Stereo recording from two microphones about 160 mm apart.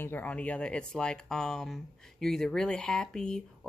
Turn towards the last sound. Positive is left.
turn(degrees=5)  # may be behind; listen again after turning